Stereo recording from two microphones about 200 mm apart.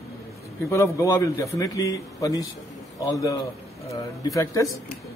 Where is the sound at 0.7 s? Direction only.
15° left (ahead or behind).